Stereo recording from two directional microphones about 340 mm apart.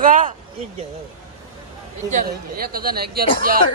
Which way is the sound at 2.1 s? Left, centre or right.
Right.